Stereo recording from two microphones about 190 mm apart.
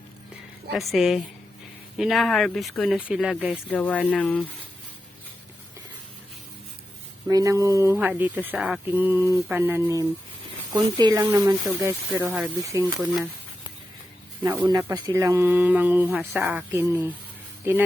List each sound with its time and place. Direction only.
0.8 s speech: centre (ahead or behind)
3.7 s speech: 5° left (ahead or behind)
7.3 s speech: 20° right (ahead or behind)
14.6 s speech: 20° right (ahead or behind)